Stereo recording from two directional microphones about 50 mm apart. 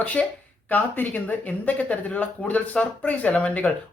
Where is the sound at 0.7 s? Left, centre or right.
Left.